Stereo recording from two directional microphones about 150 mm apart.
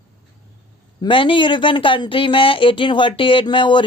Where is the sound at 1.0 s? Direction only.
35° left (ahead or behind).